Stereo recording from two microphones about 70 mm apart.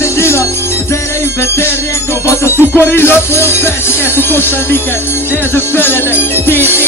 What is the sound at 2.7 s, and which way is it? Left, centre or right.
Music, left.